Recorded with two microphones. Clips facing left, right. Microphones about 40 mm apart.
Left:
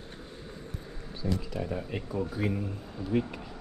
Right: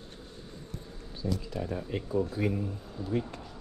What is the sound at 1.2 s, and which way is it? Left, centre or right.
Speech, left.